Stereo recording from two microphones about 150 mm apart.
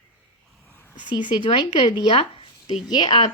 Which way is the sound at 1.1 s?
30° left (ahead or behind).